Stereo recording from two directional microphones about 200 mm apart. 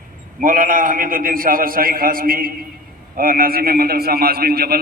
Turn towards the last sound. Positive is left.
turn(degrees=-50)  # may be behind; listen again after turning